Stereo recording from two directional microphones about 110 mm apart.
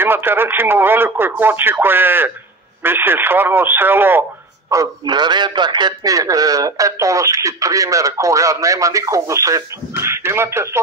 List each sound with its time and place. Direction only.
0.0 s a man's voice: 20° right (ahead or behind)
4.6 s a man's voice: 35° right (ahead or behind)